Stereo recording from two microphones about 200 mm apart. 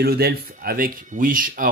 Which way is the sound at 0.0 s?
50° right (ahead or behind).